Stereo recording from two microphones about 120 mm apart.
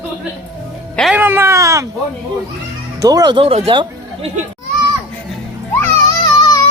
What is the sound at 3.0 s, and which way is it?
Speech, 30° right (ahead or behind).